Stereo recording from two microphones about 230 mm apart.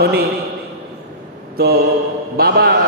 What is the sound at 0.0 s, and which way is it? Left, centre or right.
Speech, right.